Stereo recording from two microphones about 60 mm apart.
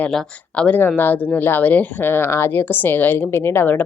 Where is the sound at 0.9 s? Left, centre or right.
Left.